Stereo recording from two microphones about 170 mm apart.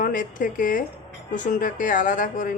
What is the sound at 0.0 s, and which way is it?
Speech, 50° left (ahead or behind).